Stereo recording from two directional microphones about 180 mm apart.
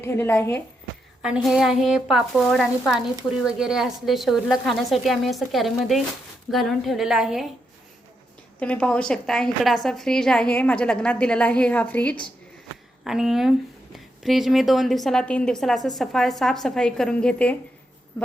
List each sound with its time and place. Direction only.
0.0 s a woman's voice: 15° left (ahead or behind)
1.2 s a woman's voice: centre (ahead or behind)
8.5 s a woman's voice: 5° left (ahead or behind)